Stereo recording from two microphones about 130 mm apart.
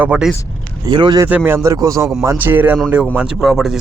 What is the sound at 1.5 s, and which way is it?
A man's voice, 20° right (ahead or behind).